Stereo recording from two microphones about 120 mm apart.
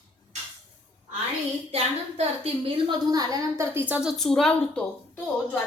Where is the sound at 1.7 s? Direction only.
55° right (ahead or behind).